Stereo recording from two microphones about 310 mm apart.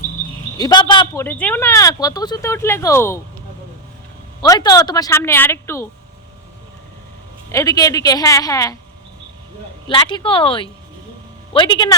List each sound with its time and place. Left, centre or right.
0.6 s speech: centre
4.4 s speech: centre
7.5 s speech: centre
9.9 s speech: centre